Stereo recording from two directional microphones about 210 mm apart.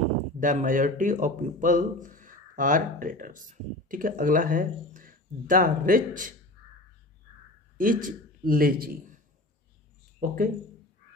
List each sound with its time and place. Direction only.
0.4 s a man's voice: 40° right (ahead or behind)
7.7 s a man's voice: 40° right (ahead or behind)
10.2 s a man's voice: 40° right (ahead or behind)